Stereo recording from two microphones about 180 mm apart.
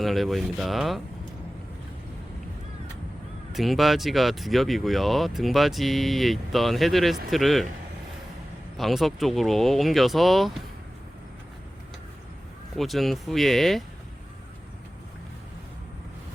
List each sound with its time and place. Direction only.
0.0 s speech: centre (ahead or behind)
3.5 s speech: centre (ahead or behind)
8.8 s speech: centre (ahead or behind)
12.7 s speech: centre (ahead or behind)